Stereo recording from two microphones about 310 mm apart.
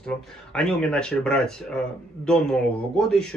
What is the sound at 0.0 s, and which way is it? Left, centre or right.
Speech, centre.